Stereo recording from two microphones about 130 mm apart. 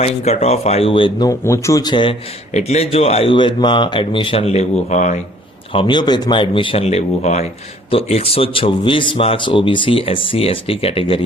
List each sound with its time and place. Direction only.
0.0 s speech: 55° left (ahead or behind)
1.3 s a man's voice: 25° left (ahead or behind)
2.5 s speech: 60° left (ahead or behind)
5.7 s speech: 35° left (ahead or behind)